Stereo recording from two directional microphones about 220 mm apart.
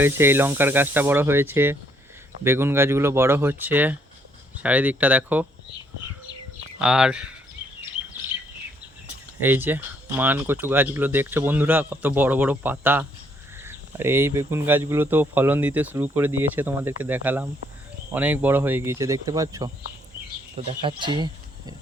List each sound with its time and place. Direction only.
0.0 s speech: 10° right (ahead or behind)
6.7 s speech: 5° right (ahead or behind)
9.4 s speech: 10° right (ahead or behind)
20.8 s speech: 20° right (ahead or behind)